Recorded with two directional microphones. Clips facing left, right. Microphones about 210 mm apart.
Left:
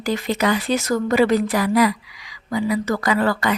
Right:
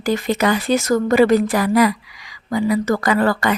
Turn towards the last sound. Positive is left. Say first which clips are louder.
# right 2 dB
turn(degrees=-50)  # may be behind; listen again after turning